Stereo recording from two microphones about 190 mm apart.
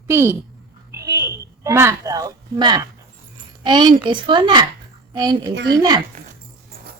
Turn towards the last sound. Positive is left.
turn(degrees=-20)  # may be behind; listen again after turning